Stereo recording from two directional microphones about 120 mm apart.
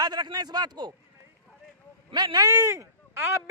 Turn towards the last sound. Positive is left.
turn(degrees=-20)  # may be behind; listen again after turning